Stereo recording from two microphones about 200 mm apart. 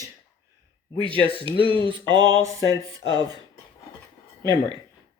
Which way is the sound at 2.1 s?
20° right (ahead or behind).